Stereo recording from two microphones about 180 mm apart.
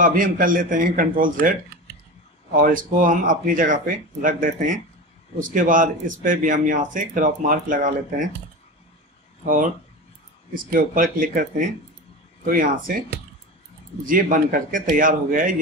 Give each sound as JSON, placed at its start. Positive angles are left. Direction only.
{"t": 0.0, "sound": "speech", "side_deg": -50}
{"t": 10.5, "sound": "speech", "side_deg": -50}